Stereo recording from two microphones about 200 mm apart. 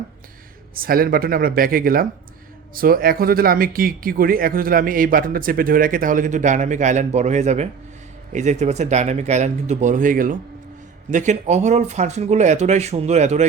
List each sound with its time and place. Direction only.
0.7 s speech: 45° right (ahead or behind)